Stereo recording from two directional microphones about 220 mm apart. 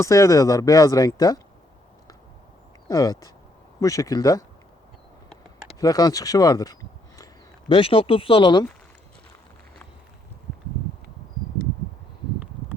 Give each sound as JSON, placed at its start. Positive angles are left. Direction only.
{"t": 0.0, "sound": "speech", "side_deg": 15}
{"t": 2.9, "sound": "speech", "side_deg": 15}
{"t": 5.8, "sound": "speech", "side_deg": 15}